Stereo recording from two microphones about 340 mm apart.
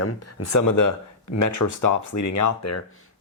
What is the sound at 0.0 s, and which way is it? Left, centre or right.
Speech, left.